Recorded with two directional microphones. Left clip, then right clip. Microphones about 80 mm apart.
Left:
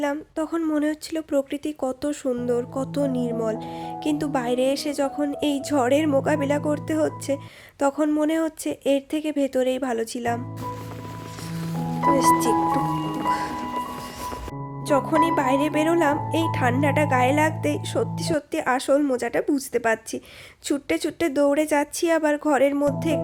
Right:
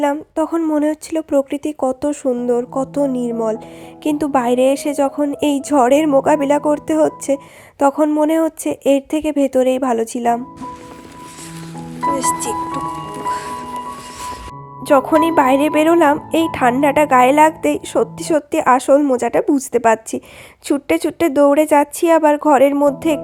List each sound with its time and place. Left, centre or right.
0.0 s a woman's voice: right
5.4 s a woman's voice: right
7.8 s a sound: right
8.2 s speech: right
12.4 s speech: left
14.8 s a woman's voice: right
20.7 s a woman's voice: right